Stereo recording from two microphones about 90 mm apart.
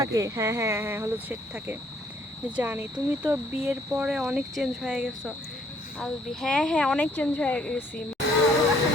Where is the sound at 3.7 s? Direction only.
10° right (ahead or behind).